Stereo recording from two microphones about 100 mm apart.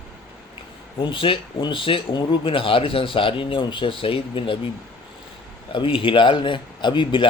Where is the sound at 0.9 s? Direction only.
60° left (ahead or behind).